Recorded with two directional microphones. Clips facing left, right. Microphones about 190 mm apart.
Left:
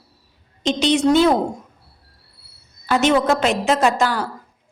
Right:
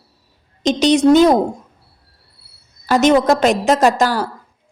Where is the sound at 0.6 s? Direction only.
40° right (ahead or behind).